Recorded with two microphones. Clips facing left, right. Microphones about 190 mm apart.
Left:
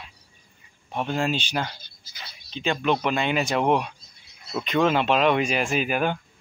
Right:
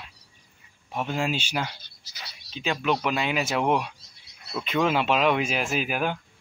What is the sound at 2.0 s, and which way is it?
Speech, 80° right.